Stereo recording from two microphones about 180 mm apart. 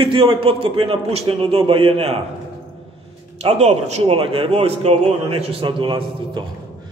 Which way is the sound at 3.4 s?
35° right (ahead or behind).